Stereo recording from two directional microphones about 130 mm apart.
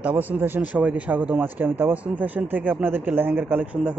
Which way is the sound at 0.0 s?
10° right (ahead or behind).